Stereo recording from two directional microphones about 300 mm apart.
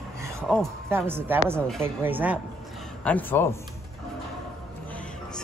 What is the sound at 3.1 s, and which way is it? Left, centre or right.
Speech, centre.